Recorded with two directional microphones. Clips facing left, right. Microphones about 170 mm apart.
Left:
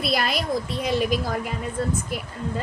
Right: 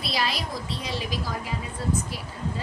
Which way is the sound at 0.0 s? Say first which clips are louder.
Left 4 dB; 55° left (ahead or behind).